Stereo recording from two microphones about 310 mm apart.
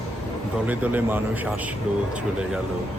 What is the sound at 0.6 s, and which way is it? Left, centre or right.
Speech, centre.